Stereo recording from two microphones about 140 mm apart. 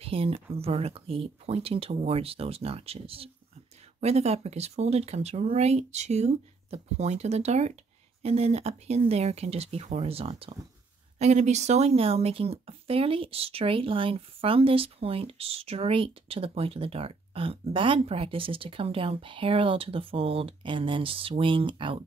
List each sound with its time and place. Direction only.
0.0 s speech: 40° right (ahead or behind)